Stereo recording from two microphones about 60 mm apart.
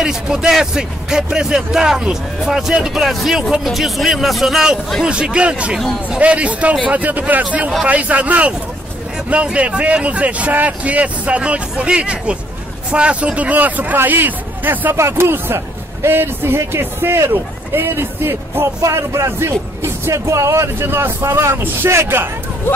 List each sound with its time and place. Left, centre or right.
0.0 s a man's voice: centre
5.0 s a man's voice: centre; by 15.0 s right
15.0 s speech: right